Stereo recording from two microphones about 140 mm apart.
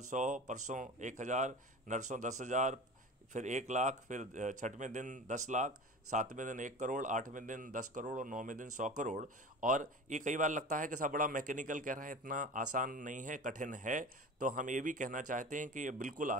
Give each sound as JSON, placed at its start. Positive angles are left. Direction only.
{"t": 0.1, "sound": "speech", "side_deg": -60}